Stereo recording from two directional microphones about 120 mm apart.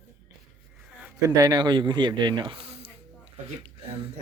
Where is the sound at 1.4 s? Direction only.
35° right (ahead or behind); by 2.8 s 55° right (ahead or behind).